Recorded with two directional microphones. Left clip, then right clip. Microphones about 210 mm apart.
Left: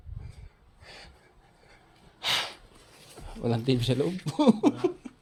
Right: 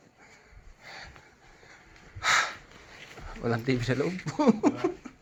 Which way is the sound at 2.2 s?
35° left (ahead or behind).